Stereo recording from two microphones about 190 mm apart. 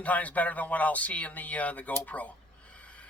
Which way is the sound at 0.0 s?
10° left (ahead or behind).